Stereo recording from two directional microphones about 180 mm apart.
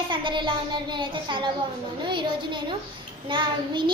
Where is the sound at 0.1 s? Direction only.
25° right (ahead or behind).